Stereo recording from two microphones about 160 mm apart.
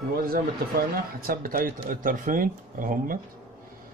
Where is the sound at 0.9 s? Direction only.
65° right (ahead or behind).